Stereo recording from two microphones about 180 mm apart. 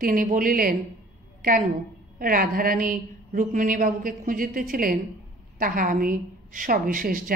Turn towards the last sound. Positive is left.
turn(degrees=-50)  # may be behind; listen again after turning